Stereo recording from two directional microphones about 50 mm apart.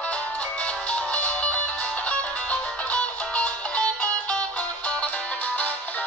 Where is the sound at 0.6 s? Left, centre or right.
Left.